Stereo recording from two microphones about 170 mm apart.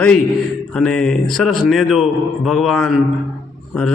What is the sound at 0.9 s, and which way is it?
A man's voice, 5° left (ahead or behind).